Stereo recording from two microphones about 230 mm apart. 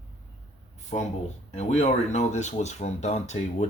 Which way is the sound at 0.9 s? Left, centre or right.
Left.